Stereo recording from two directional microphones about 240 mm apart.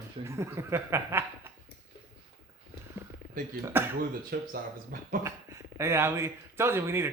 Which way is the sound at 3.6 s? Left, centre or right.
Centre.